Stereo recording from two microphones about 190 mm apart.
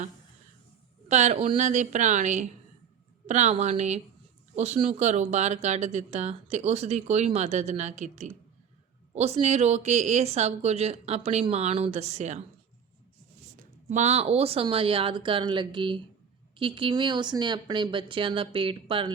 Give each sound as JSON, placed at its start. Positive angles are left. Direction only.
{"t": 1.0, "sound": "speech", "side_deg": -35}
{"t": 13.6, "sound": "speech", "side_deg": -40}